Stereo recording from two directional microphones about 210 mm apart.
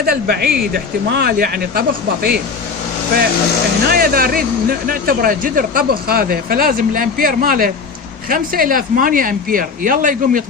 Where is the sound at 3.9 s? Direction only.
45° right (ahead or behind).